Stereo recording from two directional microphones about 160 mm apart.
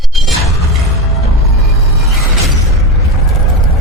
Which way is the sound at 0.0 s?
Centre (ahead or behind).